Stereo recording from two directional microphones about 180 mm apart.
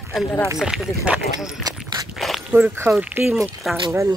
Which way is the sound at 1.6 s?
20° right (ahead or behind).